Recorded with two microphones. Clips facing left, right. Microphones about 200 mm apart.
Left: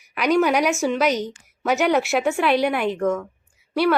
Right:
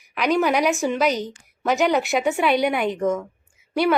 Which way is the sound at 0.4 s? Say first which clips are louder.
Even; 5° left (ahead or behind).